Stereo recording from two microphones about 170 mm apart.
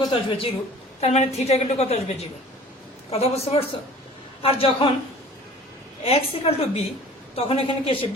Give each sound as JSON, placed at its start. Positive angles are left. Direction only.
{"t": 0.1, "sound": "a woman's voice", "side_deg": 30}
{"t": 6.1, "sound": "a woman's voice", "side_deg": 35}